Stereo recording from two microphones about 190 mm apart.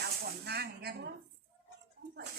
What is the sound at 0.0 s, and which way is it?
Speech, 55° right (ahead or behind).